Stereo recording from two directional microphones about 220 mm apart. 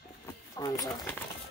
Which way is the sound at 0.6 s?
15° left (ahead or behind).